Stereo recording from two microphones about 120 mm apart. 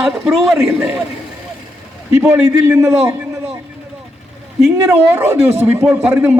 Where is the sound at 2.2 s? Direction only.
25° right (ahead or behind).